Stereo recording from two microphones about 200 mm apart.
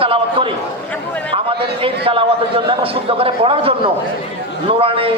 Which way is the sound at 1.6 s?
25° right (ahead or behind).